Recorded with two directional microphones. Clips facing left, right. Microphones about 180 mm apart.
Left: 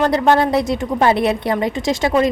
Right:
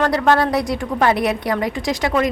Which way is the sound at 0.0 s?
20° left (ahead or behind).